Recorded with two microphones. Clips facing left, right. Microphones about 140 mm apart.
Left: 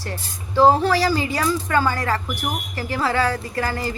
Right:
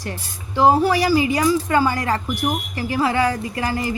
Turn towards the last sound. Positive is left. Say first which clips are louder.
# right 1 dB
turn(degrees=-15)  # may be behind; listen again after turning